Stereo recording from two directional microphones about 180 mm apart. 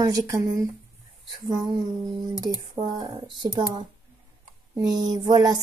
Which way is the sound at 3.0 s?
25° right (ahead or behind).